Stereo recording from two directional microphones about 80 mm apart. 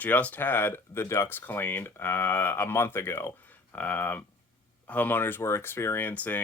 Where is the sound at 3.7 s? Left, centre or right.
Centre.